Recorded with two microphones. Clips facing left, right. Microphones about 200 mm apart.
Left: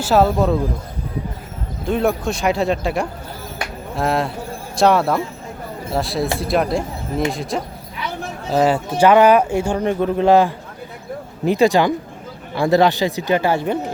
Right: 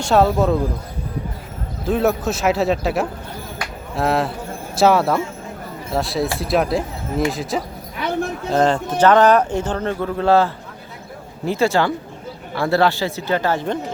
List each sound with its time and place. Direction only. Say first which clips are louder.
0.0 s speech: even; centre (ahead or behind)
1.8 s speech: even; centre (ahead or behind)